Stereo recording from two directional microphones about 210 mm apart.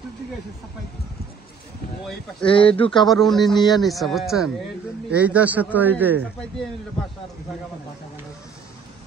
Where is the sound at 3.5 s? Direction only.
20° left (ahead or behind).